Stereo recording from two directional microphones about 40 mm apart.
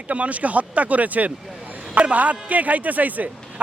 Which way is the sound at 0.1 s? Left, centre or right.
Right.